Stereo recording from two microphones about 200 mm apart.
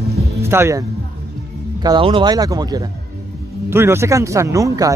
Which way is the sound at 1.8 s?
25° right (ahead or behind).